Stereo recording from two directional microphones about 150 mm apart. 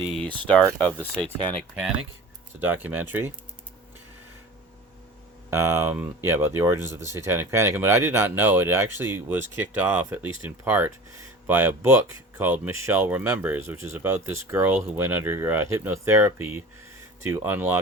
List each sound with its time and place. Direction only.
0.1 s speech: 5° left (ahead or behind)
2.6 s speech: 15° right (ahead or behind)
5.5 s speech: 15° right (ahead or behind)